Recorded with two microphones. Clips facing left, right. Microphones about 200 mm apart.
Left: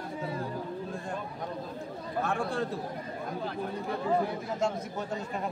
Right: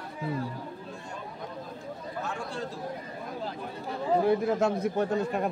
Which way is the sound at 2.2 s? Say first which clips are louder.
Left 6 dB; 55° left (ahead or behind).